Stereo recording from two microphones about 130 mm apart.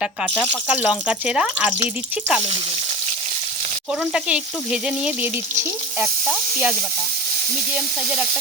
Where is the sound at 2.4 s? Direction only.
55° right (ahead or behind).